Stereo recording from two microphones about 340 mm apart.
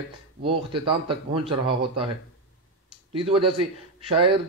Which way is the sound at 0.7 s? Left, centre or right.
Centre.